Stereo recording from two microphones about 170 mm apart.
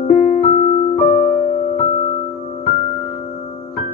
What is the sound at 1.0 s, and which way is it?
Music, 25° left (ahead or behind).